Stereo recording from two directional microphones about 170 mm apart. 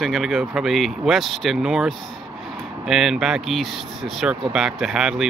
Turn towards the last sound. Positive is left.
turn(degrees=-5)  # may be behind; listen again after turning